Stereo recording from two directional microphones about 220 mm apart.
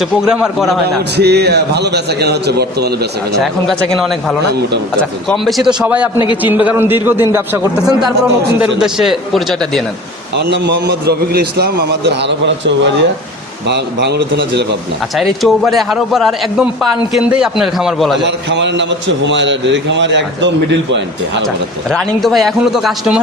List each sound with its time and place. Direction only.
0.0 s a man's voice: centre (ahead or behind)
1.1 s a man's voice: 50° right (ahead or behind)
3.4 s a man's voice: centre (ahead or behind); by 8.1 s 15° right (ahead or behind)
8.8 s a man's voice: centre (ahead or behind)
10.3 s a man's voice: 50° right (ahead or behind)
15.1 s a man's voice: centre (ahead or behind)
18.2 s a man's voice: 55° right (ahead or behind)
21.4 s a man's voice: centre (ahead or behind)